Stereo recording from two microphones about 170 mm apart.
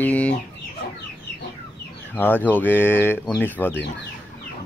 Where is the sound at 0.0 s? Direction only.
10° left (ahead or behind).